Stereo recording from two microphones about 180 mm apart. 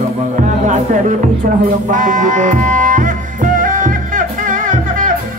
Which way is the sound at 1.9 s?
45° right (ahead or behind).